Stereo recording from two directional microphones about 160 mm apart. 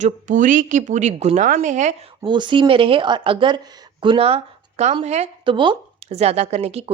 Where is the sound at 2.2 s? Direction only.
30° right (ahead or behind).